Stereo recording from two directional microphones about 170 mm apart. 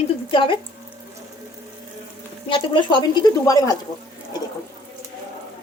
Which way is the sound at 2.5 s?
30° left (ahead or behind).